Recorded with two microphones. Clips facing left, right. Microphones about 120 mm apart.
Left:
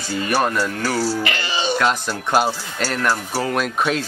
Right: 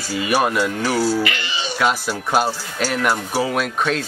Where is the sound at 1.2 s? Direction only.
40° left (ahead or behind).